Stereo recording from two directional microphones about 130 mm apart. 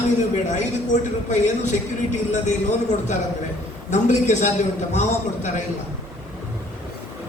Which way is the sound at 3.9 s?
65° left (ahead or behind).